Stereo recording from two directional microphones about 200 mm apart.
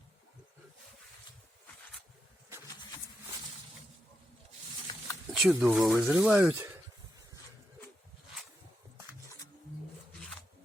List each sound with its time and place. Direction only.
4.9 s a sound: 20° left (ahead or behind)
5.3 s speech: 5° right (ahead or behind)
10.1 s zipper: 5° left (ahead or behind)